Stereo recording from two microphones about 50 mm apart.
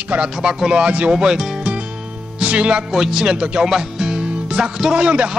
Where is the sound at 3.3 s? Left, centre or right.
Right.